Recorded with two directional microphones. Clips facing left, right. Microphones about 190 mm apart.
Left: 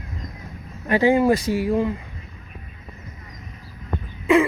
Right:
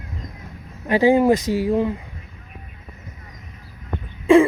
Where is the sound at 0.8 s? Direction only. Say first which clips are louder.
Right 2 dB; 15° right (ahead or behind).